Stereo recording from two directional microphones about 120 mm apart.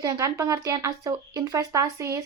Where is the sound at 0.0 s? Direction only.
25° right (ahead or behind).